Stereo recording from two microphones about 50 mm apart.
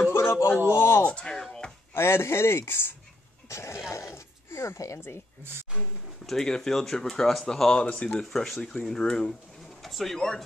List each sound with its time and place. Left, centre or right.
0.1 s a sound: left
0.7 s speech: left
1.0 s speech: left
1.3 s speech: centre
2.0 s speech: left
3.4 s speech: left
4.8 s speech: left
6.2 s speech: centre
8.3 s speech: centre